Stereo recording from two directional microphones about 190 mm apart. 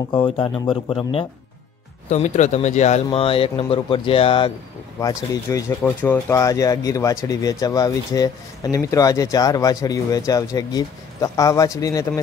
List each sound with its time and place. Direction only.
0.1 s speech: 25° left (ahead or behind)
2.0 s speech: 40° left (ahead or behind)
5.0 s speech: 15° left (ahead or behind)